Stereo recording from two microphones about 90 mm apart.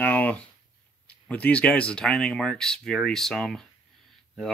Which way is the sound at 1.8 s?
10° left (ahead or behind).